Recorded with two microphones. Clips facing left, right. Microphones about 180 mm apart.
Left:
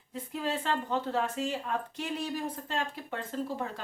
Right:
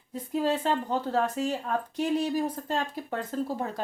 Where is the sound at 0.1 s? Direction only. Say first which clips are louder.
Right 6 dB; 40° right (ahead or behind).